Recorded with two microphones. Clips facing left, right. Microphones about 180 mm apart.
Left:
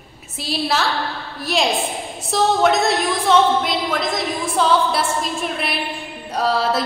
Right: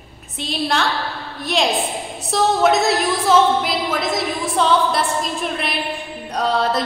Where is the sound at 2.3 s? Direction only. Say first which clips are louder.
Even; centre (ahead or behind).